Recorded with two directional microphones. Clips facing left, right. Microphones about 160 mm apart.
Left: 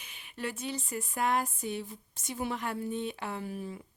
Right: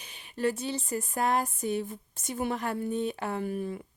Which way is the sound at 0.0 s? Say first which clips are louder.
Right 9 dB; 35° right (ahead or behind).